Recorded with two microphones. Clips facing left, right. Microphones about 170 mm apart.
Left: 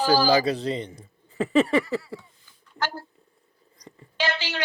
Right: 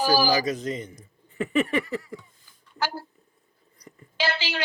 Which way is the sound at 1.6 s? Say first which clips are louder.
Left 4 dB; 35° left (ahead or behind).